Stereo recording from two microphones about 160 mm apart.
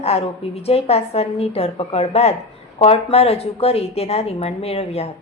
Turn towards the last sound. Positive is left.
turn(degrees=40)  # may be behind; listen again after turning